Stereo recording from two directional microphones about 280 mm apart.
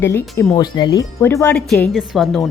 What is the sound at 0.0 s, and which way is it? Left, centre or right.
A woman's voice, centre.